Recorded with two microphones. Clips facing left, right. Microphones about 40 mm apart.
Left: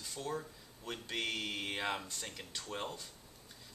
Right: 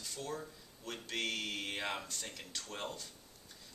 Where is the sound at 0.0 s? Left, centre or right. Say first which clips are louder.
Left 2 dB; centre.